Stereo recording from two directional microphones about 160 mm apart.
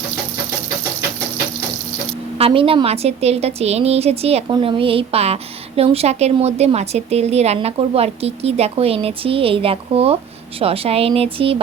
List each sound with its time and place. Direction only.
2.4 s a woman's voice: 35° right (ahead or behind)